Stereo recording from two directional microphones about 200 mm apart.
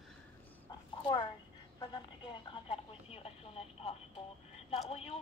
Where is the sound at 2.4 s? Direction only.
25° left (ahead or behind).